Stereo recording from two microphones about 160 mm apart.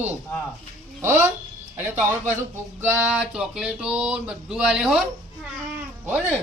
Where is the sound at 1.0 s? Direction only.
15° right (ahead or behind).